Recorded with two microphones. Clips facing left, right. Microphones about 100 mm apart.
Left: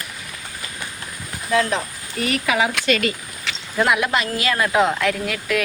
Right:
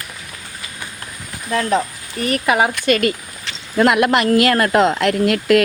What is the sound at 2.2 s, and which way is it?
Speech, 45° right (ahead or behind).